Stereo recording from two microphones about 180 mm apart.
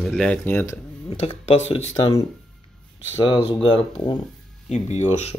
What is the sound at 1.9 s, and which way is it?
Speech, 25° left (ahead or behind).